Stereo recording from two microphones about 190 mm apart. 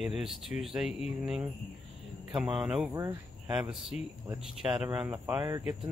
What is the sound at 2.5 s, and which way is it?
Speech, 5° right (ahead or behind).